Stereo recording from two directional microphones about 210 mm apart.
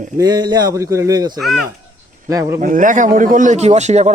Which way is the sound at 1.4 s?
Centre (ahead or behind).